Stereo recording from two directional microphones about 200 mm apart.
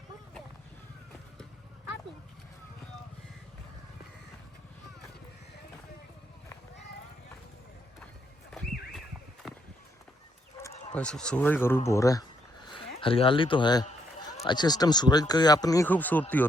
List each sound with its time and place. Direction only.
10.9 s speech: 5° left (ahead or behind)
13.0 s speech: 25° left (ahead or behind); by 16.2 s 10° left (ahead or behind)